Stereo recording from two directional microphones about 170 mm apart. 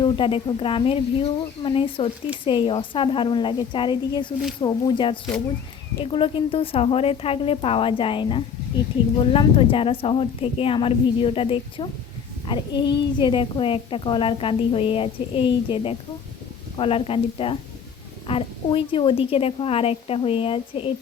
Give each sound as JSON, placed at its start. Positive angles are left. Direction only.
{"t": 0.0, "sound": "a woman's voice", "side_deg": 30}